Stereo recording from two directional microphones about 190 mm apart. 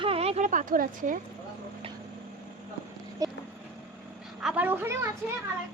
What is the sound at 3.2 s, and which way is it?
Speech, 20° right (ahead or behind).